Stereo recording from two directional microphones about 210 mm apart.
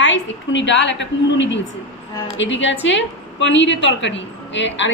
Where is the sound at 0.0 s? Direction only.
60° left (ahead or behind).